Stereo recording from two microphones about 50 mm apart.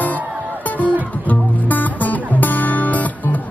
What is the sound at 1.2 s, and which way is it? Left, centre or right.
Music, left.